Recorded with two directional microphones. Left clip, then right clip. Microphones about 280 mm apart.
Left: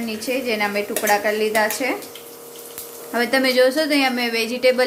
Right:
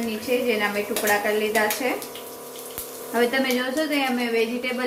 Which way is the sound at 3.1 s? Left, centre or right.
Left.